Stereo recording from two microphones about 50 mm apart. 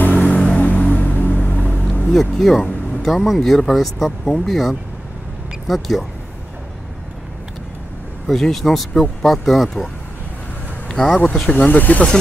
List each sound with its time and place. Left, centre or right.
0.0 s music: left
1.7 s vehicle: left
2.0 s speech: centre
8.3 s speech: centre
10.9 s a sound: centre
11.1 s speech: centre
11.5 s speech: left